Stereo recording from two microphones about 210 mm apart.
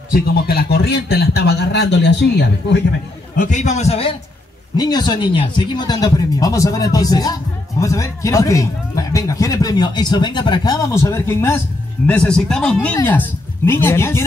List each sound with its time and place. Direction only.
0.1 s a man's voice: 45° left (ahead or behind)
3.3 s a man's voice: 35° left (ahead or behind); by 14.2 s 10° left (ahead or behind)